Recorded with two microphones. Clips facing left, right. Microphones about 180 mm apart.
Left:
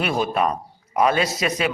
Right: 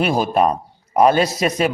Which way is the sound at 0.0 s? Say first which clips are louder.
Right 5 dB; 35° right (ahead or behind).